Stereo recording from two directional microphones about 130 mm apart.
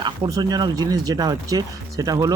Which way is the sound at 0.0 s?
30° right (ahead or behind).